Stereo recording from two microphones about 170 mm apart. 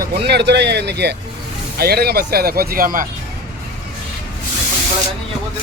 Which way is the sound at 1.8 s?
65° right (ahead or behind).